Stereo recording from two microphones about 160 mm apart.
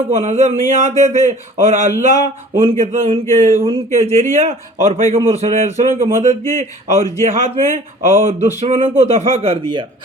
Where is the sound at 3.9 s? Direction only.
45° right (ahead or behind).